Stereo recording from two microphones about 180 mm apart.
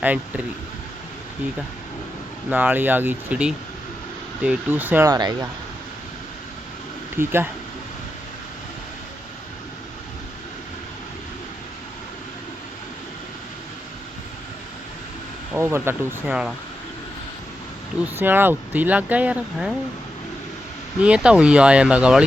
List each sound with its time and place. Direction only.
0.0 s speech: 10° right (ahead or behind)
2.5 s speech: 10° right (ahead or behind)
7.2 s speech: 10° right (ahead or behind)
15.5 s speech: 15° right (ahead or behind)
18.0 s speech: 10° right (ahead or behind)
21.0 s speech: 5° right (ahead or behind)